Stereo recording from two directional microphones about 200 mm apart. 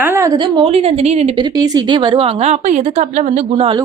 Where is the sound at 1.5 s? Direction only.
20° right (ahead or behind).